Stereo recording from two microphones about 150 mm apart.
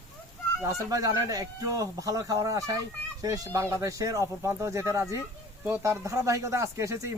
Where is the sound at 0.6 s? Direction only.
25° right (ahead or behind).